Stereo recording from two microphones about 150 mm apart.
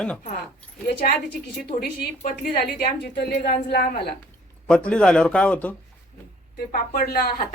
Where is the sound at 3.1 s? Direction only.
90° left.